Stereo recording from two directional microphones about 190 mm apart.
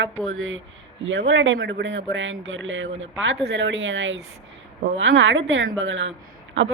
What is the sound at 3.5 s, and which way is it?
Speech, 70° right (ahead or behind).